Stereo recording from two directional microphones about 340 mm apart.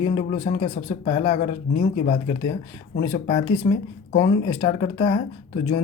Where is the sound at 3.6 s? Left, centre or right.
Centre.